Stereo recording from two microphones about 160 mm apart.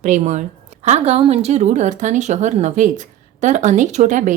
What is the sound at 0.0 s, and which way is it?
A woman's voice, 50° right (ahead or behind).